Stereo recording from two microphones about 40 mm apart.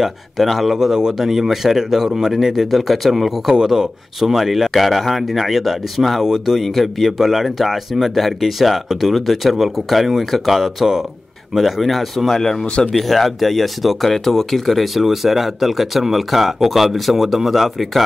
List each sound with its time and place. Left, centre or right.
0.0 s speech: centre
0.7 s speech: centre
3.5 s speech: centre
6.2 s speech: centre
6.6 s speech: centre
12.4 s speech: centre
12.6 s speech: left
12.9 s speech: centre